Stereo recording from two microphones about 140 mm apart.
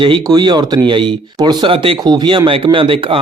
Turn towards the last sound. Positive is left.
turn(degrees=-40)  # may be behind; listen again after turning